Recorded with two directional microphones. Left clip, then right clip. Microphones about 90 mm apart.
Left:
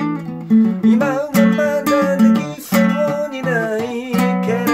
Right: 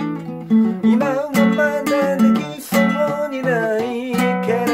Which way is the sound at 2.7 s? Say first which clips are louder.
Even; 35° left (ahead or behind).